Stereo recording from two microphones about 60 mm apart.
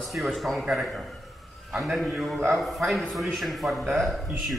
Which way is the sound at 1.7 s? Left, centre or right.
Centre.